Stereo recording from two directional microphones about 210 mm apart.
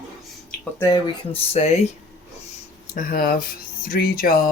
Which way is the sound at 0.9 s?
30° left (ahead or behind).